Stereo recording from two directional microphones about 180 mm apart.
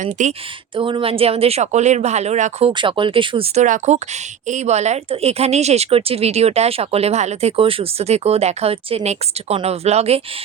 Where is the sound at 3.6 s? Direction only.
45° right (ahead or behind).